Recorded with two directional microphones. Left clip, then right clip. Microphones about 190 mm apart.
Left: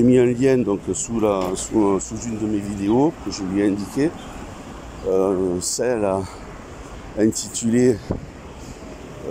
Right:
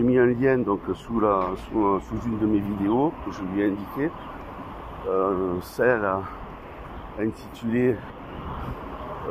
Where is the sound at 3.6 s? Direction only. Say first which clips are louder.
Left 6 dB; 20° left (ahead or behind).